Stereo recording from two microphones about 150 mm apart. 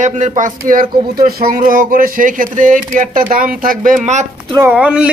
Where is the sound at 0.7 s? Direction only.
80° right; by 4.2 s 55° right (ahead or behind).